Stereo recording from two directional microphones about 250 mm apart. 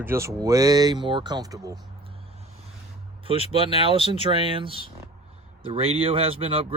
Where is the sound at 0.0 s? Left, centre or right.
Centre.